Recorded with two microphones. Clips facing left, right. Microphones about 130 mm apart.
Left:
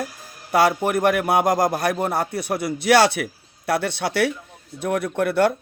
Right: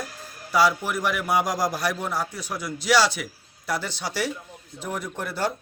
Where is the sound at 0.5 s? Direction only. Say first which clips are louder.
Left 4 dB; 55° left (ahead or behind).